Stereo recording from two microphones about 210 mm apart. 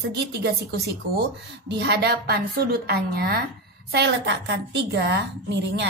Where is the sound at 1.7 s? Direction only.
55° right (ahead or behind).